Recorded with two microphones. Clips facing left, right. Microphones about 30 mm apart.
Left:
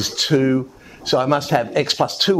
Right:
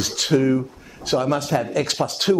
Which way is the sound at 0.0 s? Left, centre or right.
Centre.